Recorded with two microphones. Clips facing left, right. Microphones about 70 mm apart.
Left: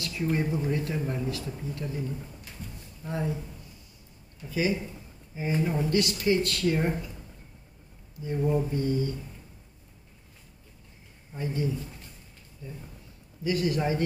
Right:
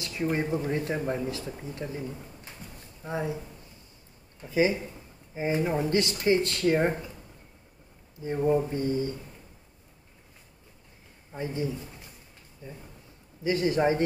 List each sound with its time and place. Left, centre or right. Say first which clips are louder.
0.0 s speech: even; right
4.4 s speech: right 3 dB; right
8.2 s speech: right 2 dB; right
11.3 s speech: left 1 dB; right